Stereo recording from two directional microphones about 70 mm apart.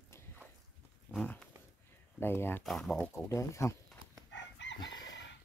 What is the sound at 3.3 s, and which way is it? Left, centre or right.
Speech, left.